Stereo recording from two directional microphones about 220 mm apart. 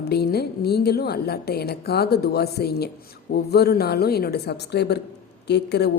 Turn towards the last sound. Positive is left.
turn(degrees=50)  # may be behind; listen again after turning